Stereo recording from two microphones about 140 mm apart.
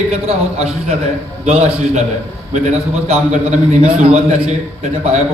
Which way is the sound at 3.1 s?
50° right (ahead or behind).